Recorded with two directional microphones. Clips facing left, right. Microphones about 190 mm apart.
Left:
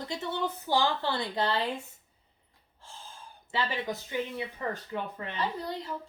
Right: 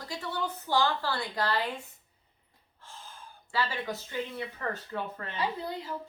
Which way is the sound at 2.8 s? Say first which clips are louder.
Even; 30° left (ahead or behind).